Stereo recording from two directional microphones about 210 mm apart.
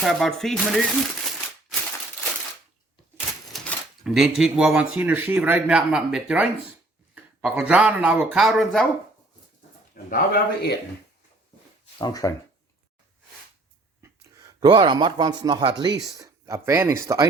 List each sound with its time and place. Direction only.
0.0 s speech: centre (ahead or behind)
3.2 s speech: centre (ahead or behind)
9.9 s speech: 45° left (ahead or behind)
11.9 s speech: 20° left (ahead or behind)
14.6 s speech: 20° right (ahead or behind)